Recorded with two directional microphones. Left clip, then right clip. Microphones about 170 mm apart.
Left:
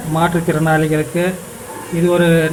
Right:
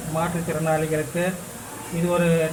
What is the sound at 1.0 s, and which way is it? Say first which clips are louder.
A man's voice: left 7 dB; 10° left (ahead or behind).